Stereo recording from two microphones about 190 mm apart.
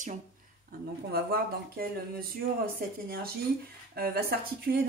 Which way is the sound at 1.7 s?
50° right (ahead or behind).